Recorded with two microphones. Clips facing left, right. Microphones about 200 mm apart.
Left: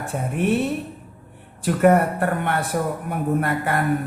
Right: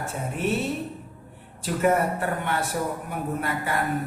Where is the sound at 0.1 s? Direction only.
55° left (ahead or behind).